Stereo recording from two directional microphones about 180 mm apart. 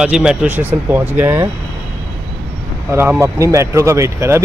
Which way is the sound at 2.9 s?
15° right (ahead or behind).